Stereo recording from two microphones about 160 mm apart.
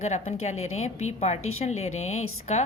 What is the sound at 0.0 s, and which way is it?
A woman's voice, 45° left (ahead or behind).